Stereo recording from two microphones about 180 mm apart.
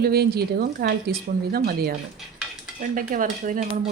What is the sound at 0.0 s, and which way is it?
Speech, 60° right (ahead or behind).